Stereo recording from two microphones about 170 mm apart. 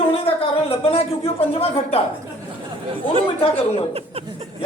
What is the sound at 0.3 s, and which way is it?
Speech, 35° left (ahead or behind).